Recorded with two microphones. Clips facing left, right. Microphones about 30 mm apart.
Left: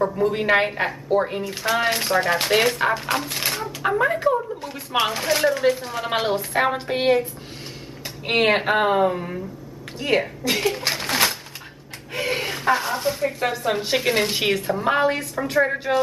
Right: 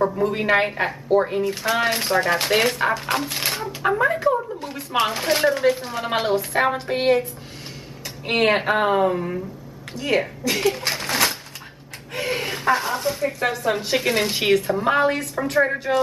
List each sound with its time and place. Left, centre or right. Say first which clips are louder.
0.0 s speech: even; centre
8.3 s speech: even; centre
10.9 s a sound: even; centre
12.1 s speech: even; centre